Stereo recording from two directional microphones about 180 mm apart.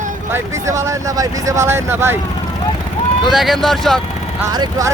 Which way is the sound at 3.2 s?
Centre (ahead or behind).